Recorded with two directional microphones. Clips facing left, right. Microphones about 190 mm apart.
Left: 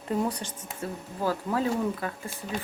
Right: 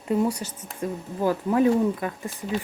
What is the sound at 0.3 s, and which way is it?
Speech, 10° right (ahead or behind).